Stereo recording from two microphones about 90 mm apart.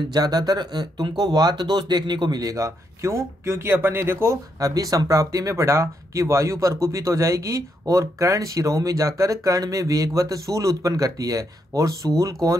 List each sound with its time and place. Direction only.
0.1 s speech: 50° right (ahead or behind)